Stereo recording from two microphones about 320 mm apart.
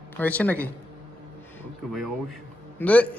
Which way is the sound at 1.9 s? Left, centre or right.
Centre.